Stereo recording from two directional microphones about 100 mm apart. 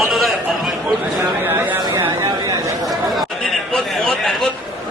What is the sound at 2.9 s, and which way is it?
Chatter, centre (ahead or behind).